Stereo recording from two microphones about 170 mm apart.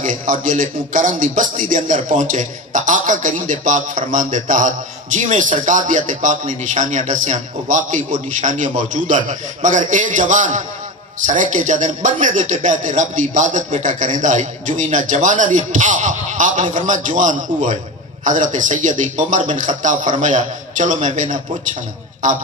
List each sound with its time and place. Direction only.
0.0 s a man's voice: 50° right (ahead or behind)